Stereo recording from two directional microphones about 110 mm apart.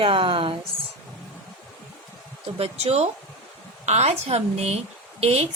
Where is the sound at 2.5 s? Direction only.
65° right (ahead or behind).